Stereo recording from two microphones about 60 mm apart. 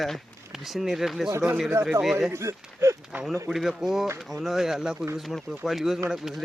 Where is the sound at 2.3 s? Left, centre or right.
Right.